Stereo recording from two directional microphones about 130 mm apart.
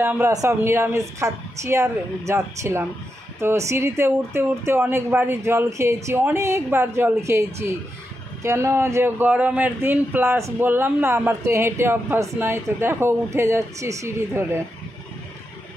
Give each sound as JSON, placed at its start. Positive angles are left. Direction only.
{"t": 0.0, "sound": "a man's voice", "side_deg": -15}